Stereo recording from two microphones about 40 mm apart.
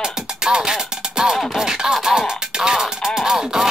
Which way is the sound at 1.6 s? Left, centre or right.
Centre.